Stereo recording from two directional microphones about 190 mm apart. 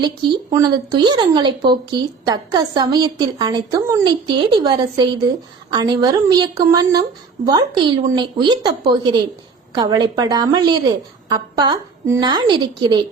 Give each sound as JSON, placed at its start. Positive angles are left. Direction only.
{"t": 0.5, "sound": "speech", "side_deg": -20}